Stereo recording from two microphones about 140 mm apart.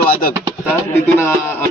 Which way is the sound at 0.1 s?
90° left.